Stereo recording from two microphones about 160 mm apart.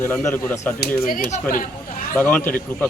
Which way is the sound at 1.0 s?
55° left (ahead or behind).